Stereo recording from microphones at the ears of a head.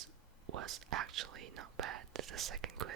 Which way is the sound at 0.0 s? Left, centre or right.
Right.